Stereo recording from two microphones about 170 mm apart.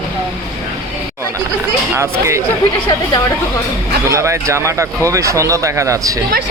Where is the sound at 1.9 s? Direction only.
15° right (ahead or behind).